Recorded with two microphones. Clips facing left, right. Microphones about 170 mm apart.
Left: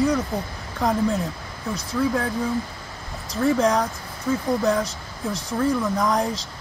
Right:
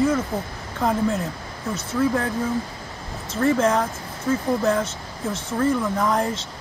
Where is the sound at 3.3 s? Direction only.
Centre (ahead or behind).